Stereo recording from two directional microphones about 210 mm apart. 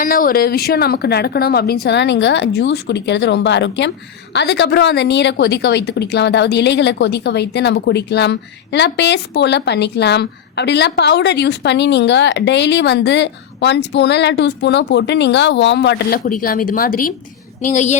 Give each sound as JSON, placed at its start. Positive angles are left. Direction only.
{"t": 0.0, "sound": "a woman's voice", "side_deg": 40}